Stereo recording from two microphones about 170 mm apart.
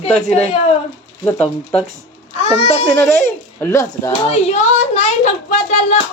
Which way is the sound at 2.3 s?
35° left (ahead or behind).